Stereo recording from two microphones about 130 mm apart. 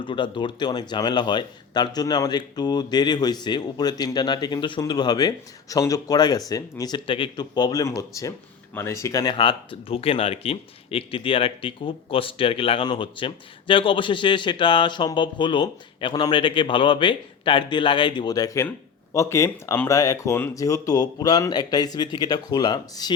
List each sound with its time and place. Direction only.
0.0 s speech: 35° left (ahead or behind)
9.3 s speech: 40° left (ahead or behind)